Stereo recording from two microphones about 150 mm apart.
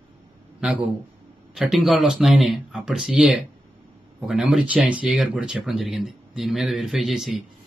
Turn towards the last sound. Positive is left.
turn(degrees=0)  # may be behind; listen again after turning